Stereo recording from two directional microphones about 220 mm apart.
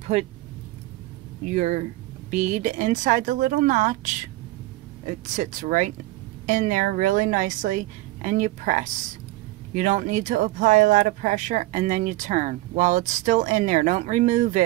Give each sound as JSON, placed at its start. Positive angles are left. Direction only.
{"t": 0.1, "sound": "speech", "side_deg": -30}
{"t": 1.4, "sound": "speech", "side_deg": -30}